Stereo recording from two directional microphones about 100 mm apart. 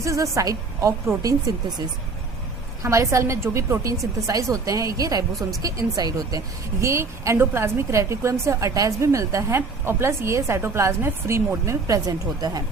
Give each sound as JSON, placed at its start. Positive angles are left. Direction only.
{"t": 0.0, "sound": "a woman's voice", "side_deg": -30}
{"t": 2.8, "sound": "a woman's voice", "side_deg": -30}
{"t": 6.8, "sound": "a woman's voice", "side_deg": -30}